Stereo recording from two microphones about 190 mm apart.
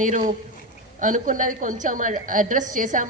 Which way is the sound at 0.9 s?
40° right (ahead or behind).